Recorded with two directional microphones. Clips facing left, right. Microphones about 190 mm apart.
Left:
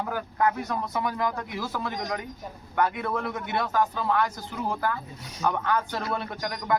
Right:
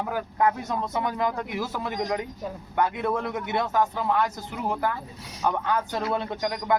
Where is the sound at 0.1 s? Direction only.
25° right (ahead or behind).